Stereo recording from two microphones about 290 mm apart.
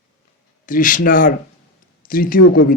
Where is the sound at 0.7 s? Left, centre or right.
Left.